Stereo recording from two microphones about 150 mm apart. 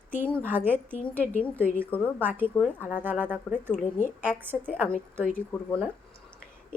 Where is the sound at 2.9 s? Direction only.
10° right (ahead or behind).